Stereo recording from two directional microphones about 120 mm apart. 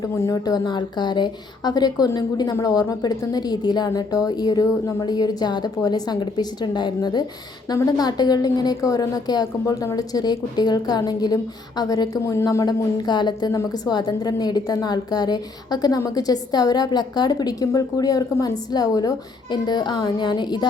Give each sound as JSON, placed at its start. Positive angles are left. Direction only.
{"t": 0.0, "sound": "speech", "side_deg": 30}